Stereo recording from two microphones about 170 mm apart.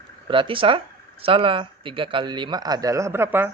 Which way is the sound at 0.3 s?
30° right (ahead or behind).